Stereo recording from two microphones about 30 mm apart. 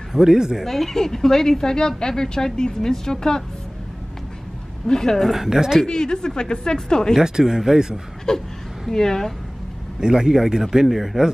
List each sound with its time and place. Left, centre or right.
0.1 s speech: centre
0.7 s a woman's voice: centre
4.8 s a woman's voice: centre
5.3 s speech: centre
5.9 s a woman's voice: left
7.2 s speech: centre
8.3 s a woman's voice: centre
9.9 s speech: right